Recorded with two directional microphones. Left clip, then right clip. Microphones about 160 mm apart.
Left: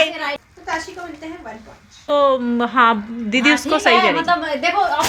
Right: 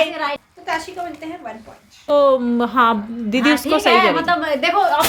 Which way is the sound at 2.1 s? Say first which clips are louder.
Right 2 dB; 5° right (ahead or behind).